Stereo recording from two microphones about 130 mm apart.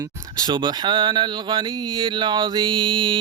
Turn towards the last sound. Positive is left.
turn(degrees=-40)  # may be behind; listen again after turning